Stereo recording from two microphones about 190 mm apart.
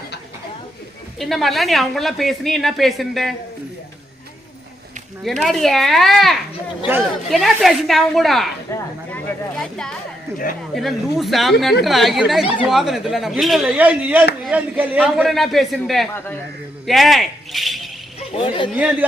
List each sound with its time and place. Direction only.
1.2 s speech: centre (ahead or behind)
5.2 s speech: centre (ahead or behind)
8.7 s speech: 15° left (ahead or behind)
10.8 s speech: centre (ahead or behind)
18.3 s speech: 30° left (ahead or behind)
18.7 s speech: 10° right (ahead or behind)